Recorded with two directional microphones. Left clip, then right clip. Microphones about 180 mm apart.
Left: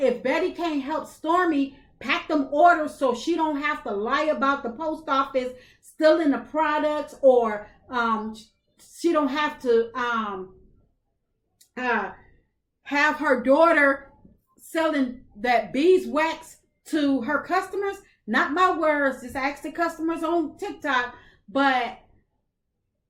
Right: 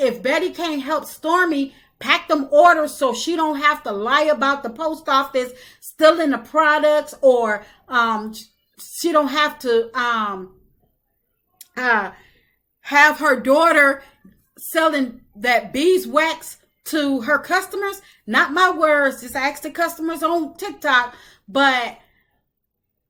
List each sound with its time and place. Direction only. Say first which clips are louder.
0.0 s a woman's voice: right 4 dB; 20° right (ahead or behind)
11.6 s a woman's voice: right 7 dB; 20° right (ahead or behind)